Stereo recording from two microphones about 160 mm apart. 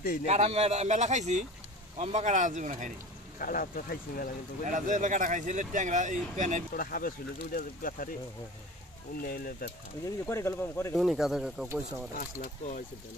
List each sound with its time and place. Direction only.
0.3 s speech: 40° right (ahead or behind)
3.3 s speech: 60° left (ahead or behind)
4.6 s speech: 55° right (ahead or behind)
6.8 s speech: 65° left (ahead or behind)
9.2 s speech: 65° left (ahead or behind)
10.0 s speech: 15° left (ahead or behind)
11.0 s speech: centre (ahead or behind)
12.2 s speech: 60° left (ahead or behind)